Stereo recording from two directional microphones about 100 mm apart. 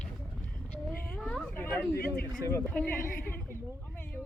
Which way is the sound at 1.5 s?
20° left (ahead or behind).